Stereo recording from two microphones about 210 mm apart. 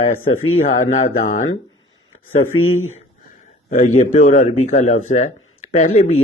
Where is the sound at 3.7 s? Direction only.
35° left (ahead or behind).